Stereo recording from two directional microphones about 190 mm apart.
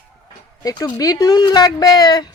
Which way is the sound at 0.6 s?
20° left (ahead or behind).